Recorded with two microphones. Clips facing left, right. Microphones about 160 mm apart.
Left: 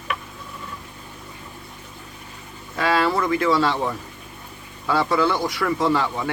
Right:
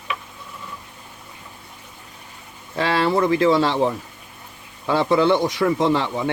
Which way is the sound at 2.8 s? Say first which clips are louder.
Right 2 dB; 25° right (ahead or behind).